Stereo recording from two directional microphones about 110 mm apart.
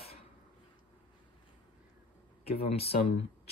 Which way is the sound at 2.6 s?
65° left (ahead or behind).